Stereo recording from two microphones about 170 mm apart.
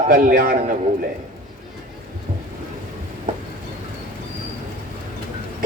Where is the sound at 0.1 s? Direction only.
55° right (ahead or behind).